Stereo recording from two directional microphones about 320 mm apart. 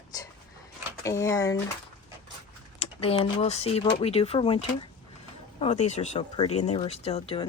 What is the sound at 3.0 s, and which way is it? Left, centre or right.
Speech, centre.